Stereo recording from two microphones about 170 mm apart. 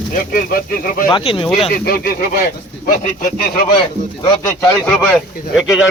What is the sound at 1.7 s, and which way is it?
Speech, 65° left (ahead or behind).